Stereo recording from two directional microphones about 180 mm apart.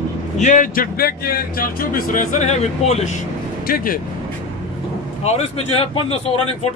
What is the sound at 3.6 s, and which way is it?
Speech, 55° left (ahead or behind).